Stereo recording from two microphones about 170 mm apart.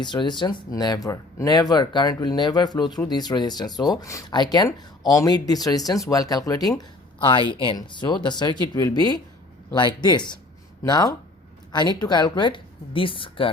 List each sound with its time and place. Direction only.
0.0 s speech: 25° left (ahead or behind)